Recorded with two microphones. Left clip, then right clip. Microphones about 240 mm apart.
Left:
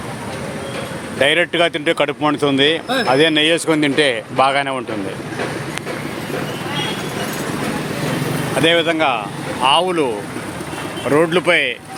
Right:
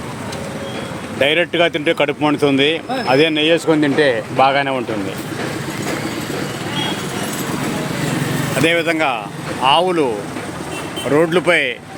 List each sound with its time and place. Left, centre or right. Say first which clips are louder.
1.2 s speech: even; centre
8.5 s speech: left 1 dB; centre
11.1 s speech: even; centre